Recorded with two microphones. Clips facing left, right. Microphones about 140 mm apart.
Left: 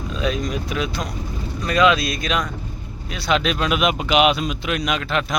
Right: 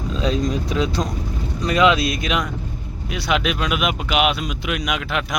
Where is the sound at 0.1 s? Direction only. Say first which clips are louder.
Right 2 dB; 25° right (ahead or behind).